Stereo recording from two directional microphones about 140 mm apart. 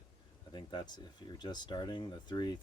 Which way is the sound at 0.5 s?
30° left (ahead or behind).